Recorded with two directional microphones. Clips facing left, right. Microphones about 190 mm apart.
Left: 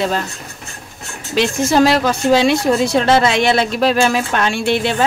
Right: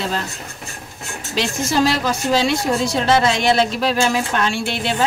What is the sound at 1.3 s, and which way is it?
A woman's voice, 60° left (ahead or behind).